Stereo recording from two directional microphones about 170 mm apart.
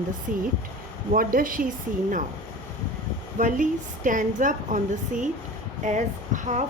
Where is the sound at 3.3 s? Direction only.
50° right (ahead or behind).